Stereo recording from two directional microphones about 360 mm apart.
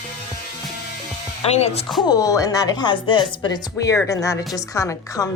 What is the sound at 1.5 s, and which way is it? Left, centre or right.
Speech, centre.